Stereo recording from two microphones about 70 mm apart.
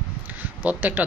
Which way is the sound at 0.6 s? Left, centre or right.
Right.